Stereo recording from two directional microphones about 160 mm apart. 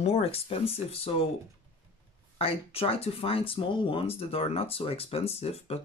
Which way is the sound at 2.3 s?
35° left (ahead or behind).